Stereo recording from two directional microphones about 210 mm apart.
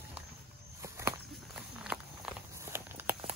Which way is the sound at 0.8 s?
15° right (ahead or behind).